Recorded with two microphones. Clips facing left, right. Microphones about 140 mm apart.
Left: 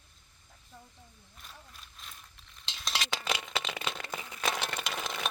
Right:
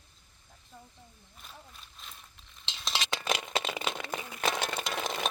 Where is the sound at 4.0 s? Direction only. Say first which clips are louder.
Right 3 dB; 15° right (ahead or behind).